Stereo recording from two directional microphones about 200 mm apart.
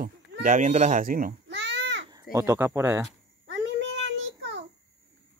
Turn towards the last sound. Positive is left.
turn(degrees=-65)  # may be behind; listen again after turning